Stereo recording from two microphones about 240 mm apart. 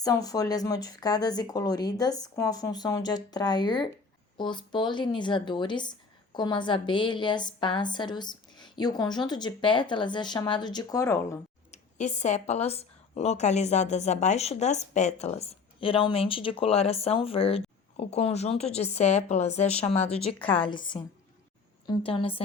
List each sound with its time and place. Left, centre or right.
0.0 s a woman's voice: centre
11.7 s a woman's voice: left